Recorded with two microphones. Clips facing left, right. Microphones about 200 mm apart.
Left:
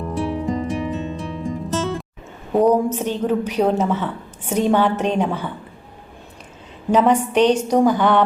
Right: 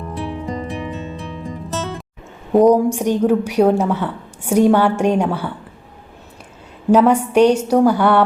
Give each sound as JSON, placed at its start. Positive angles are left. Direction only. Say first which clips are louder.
{"t": 0.1, "sound": "music", "louder": "left 3 dB", "side_deg": 0}
{"t": 2.6, "sound": "a woman's voice", "louder": "right 4 dB", "side_deg": -15}
{"t": 6.9, "sound": "a woman's voice", "louder": "right 3 dB", "side_deg": -10}